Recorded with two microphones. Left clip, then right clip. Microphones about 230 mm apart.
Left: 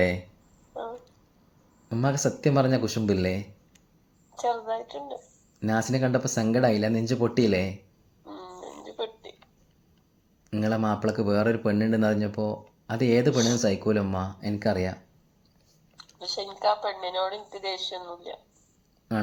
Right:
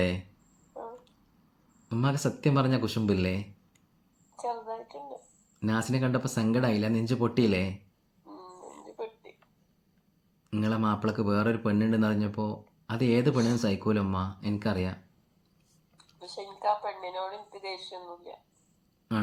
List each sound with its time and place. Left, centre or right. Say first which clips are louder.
1.9 s speech: left 4 dB; centre
4.4 s speech: left 7 dB; left
5.5 s speech: left 4 dB; centre
8.2 s a sound: left 6 dB; left
10.5 s speech: left 3 dB; centre
16.0 s speech: left 9 dB; left